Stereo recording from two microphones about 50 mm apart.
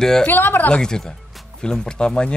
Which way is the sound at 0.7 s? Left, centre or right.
Centre.